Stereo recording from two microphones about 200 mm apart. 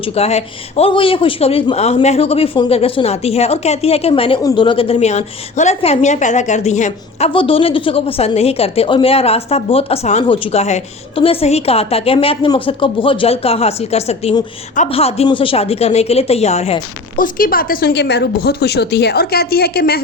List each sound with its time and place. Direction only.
0.0 s speech: 30° left (ahead or behind)
17.2 s speech: 45° left (ahead or behind)